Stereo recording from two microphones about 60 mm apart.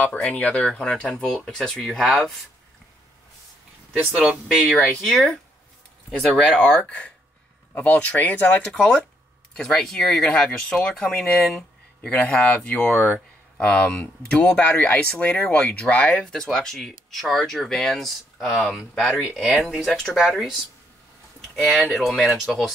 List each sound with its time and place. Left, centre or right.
0.0 s speech: left
0.8 s speech: centre
1.8 s speech: centre
4.1 s speech: centre
4.6 s speech: centre; by 13.2 s left
13.6 s speech: centre
14.6 s speech: left
16.4 s speech: centre
21.5 s speech: centre